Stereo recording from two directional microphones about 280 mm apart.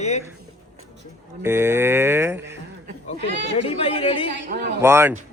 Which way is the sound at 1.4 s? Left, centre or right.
Centre.